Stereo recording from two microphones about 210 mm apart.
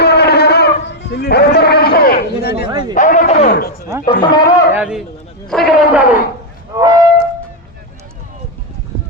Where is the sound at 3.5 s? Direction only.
45° left (ahead or behind).